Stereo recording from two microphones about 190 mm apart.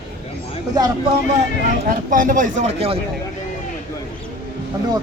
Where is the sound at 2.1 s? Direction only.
45° right (ahead or behind).